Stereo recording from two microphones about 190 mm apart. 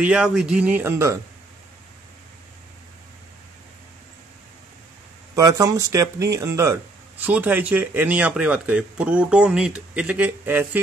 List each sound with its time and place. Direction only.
0.0 s speech: 5° right (ahead or behind)
5.3 s speech: 15° right (ahead or behind)